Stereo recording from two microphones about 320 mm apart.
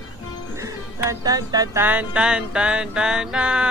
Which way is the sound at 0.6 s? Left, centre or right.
Centre.